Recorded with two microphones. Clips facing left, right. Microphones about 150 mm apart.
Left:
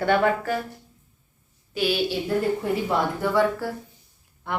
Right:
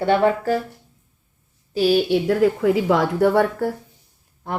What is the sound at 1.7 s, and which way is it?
Speech, 40° right (ahead or behind).